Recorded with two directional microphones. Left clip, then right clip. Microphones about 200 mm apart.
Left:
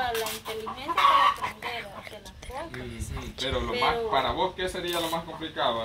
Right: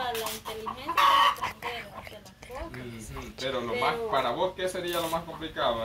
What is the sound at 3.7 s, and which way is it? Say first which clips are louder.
Speech: left 3 dB; 10° right (ahead or behind).